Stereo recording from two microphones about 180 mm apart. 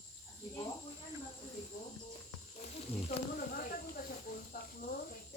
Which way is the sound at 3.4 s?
55° left (ahead or behind).